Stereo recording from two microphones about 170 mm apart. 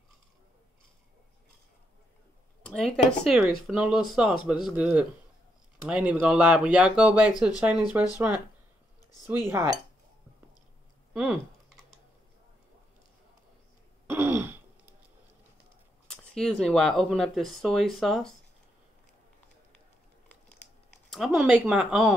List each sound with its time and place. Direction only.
2.6 s speech: 5° left (ahead or behind); by 8.1 s 15° right (ahead or behind)
9.3 s speech: 15° right (ahead or behind)
11.1 s typing: 5° right (ahead or behind)
14.0 s throat clearing: 10° right (ahead or behind)
16.1 s speech: 5° left (ahead or behind)
21.1 s speech: centre (ahead or behind)